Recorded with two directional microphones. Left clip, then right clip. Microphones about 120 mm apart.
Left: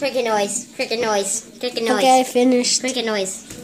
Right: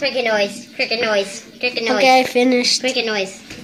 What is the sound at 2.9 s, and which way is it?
Speech, 30° left (ahead or behind).